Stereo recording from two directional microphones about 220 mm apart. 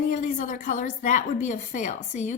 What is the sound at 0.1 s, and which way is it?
A woman's voice, 35° left (ahead or behind).